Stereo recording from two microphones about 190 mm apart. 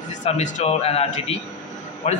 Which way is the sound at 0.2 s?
40° left (ahead or behind).